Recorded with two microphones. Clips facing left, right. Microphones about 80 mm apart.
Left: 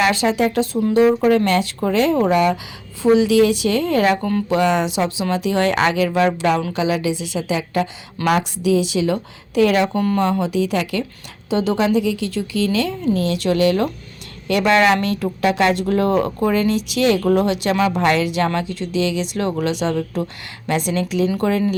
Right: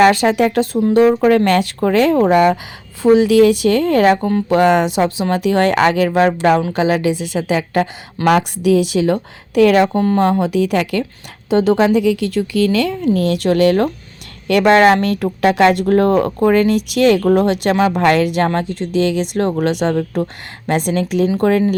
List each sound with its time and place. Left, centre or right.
0.0 s speech: right
2.1 s a woman's voice: right
4.2 s speech: right
4.4 s a woman's voice: right
9.8 s a woman's voice: right
10.2 s a woman's voice: right
14.7 s a woman's voice: right
15.0 s a woman's voice: right
17.9 s a woman's voice: right